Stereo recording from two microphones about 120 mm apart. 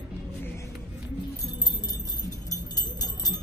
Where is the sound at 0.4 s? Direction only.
20° left (ahead or behind).